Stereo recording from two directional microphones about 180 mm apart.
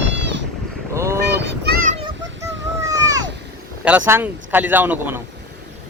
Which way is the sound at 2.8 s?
20° right (ahead or behind).